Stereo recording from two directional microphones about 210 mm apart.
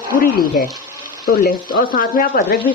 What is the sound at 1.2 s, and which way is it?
Speech, 45° left (ahead or behind).